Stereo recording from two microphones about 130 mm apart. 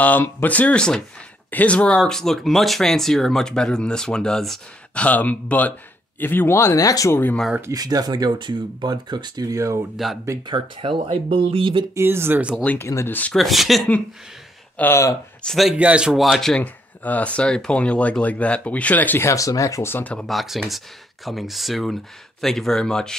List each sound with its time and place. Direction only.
0.0 s speech: 15° left (ahead or behind)
7.7 s speech: 30° right (ahead or behind)
10.0 s speech: centre (ahead or behind)
10.4 s speech: 40° right (ahead or behind)
11.9 s speech: 20° right (ahead or behind)
12.6 s speech: 20° left (ahead or behind)
13.4 s speech: centre (ahead or behind)
14.8 s speech: 20° left (ahead or behind)
15.4 s speech: centre (ahead or behind)